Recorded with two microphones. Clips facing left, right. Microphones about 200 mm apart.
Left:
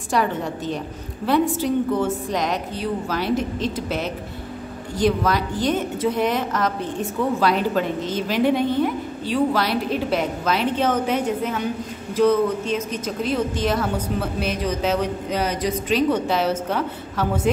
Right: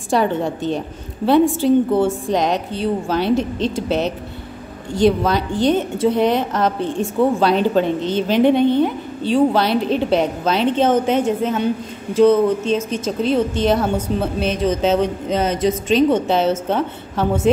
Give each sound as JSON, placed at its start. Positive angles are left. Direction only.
{"t": 0.1, "sound": "a woman's voice", "side_deg": -25}